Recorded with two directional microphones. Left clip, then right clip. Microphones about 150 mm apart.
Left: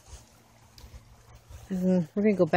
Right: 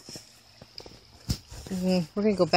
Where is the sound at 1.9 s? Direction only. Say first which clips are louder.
Even; 20° left (ahead or behind).